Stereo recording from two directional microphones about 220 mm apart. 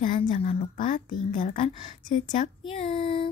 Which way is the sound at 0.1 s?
30° left (ahead or behind).